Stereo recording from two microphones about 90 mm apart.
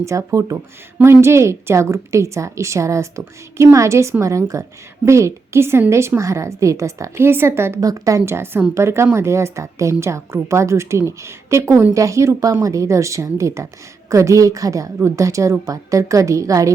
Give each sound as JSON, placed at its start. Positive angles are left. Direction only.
{"t": 0.0, "sound": "a woman's voice", "side_deg": -35}
{"t": 7.8, "sound": "a woman's voice", "side_deg": -40}